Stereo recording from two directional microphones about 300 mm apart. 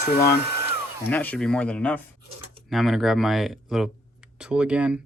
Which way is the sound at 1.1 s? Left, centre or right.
Centre.